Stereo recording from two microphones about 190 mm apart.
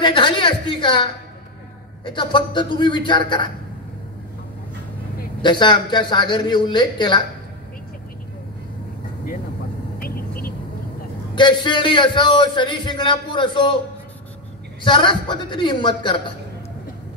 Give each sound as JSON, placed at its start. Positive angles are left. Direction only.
{"t": 0.0, "sound": "a man's voice", "side_deg": 25}
{"t": 2.0, "sound": "a man's voice", "side_deg": 25}
{"t": 5.4, "sound": "a man's voice", "side_deg": 25}
{"t": 9.9, "sound": "vehicle", "side_deg": 50}
{"t": 11.3, "sound": "a man's voice", "side_deg": 25}
{"t": 14.8, "sound": "a man's voice", "side_deg": 25}